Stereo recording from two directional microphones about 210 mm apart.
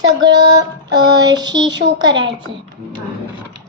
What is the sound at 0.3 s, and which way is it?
Child singing, 20° right (ahead or behind).